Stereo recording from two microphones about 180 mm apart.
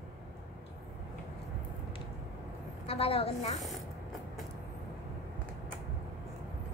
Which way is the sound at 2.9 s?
30° left (ahead or behind).